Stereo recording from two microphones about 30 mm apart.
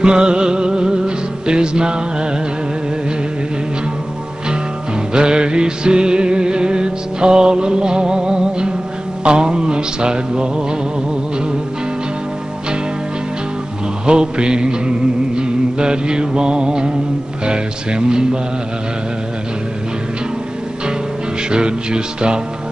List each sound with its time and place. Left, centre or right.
0.0 s music: right
5.1 s music: right
14.0 s music: right
17.5 s speech: right
21.5 s music: right